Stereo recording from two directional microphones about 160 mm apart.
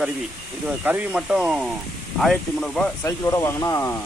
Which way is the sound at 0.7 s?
10° right (ahead or behind).